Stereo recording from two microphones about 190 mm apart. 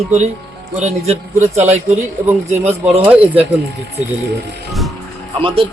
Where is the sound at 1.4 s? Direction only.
35° right (ahead or behind).